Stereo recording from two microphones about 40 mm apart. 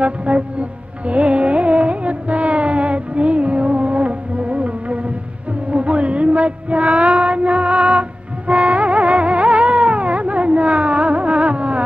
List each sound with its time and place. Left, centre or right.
0.0 s music: right